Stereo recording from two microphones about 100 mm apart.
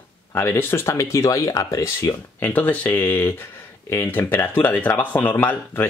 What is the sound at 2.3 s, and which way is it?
Speech, 20° left (ahead or behind).